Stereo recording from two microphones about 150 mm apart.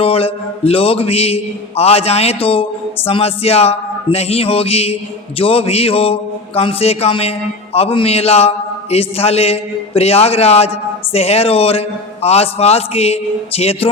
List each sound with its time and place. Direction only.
0.0 s mantra: 40° left (ahead or behind)
11.1 s a man's voice: 45° left (ahead or behind)